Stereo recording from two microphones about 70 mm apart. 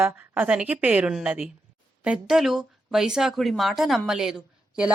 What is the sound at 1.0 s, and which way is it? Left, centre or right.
A woman's voice, centre.